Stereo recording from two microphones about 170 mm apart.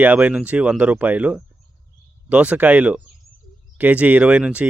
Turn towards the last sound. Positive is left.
turn(degrees=-5)  # may be behind; listen again after turning